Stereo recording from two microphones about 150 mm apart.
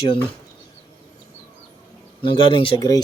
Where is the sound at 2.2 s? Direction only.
35° left (ahead or behind).